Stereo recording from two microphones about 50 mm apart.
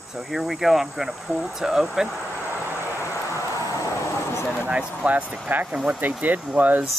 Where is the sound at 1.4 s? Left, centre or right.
Centre.